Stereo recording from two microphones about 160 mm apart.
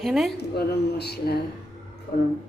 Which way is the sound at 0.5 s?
85° left.